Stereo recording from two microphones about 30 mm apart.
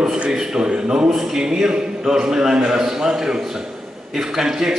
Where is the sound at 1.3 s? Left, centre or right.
Right.